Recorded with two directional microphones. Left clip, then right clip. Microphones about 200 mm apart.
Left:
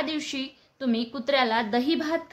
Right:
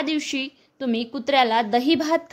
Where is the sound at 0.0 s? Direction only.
35° right (ahead or behind).